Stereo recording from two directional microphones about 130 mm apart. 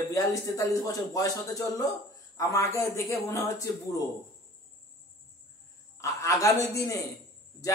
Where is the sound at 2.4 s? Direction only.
25° left (ahead or behind).